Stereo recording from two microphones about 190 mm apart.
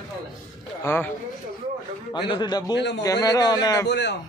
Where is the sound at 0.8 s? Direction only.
10° left (ahead or behind).